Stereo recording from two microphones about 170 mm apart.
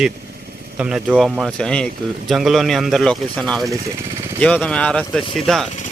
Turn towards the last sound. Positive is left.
turn(degrees=0)  # may be behind; listen again after turning